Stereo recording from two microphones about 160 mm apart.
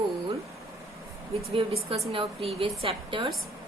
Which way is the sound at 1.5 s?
35° right (ahead or behind).